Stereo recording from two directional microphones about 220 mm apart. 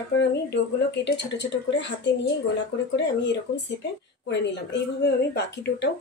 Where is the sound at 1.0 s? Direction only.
55° left (ahead or behind).